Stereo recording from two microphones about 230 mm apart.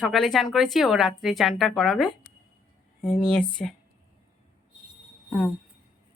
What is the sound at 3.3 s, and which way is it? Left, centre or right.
Speech, centre.